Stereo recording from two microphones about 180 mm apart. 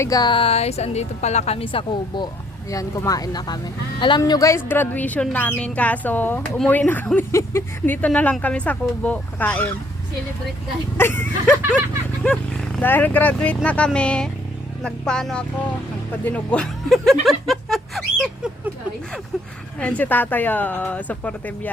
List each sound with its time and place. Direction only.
0.0 s a woman's voice: 20° left (ahead or behind)
10.9 s speech: 10° left (ahead or behind)
17.2 s a sound: centre (ahead or behind)
19.8 s speech: 5° left (ahead or behind)